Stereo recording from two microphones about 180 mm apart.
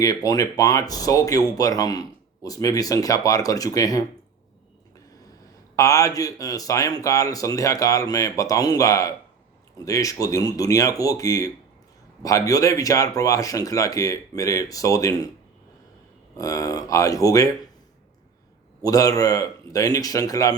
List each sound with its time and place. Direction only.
0.0 s speech: 20° left (ahead or behind)
5.7 s speech: 20° left (ahead or behind)
16.4 s speech: 20° left (ahead or behind)
18.8 s speech: 20° left (ahead or behind)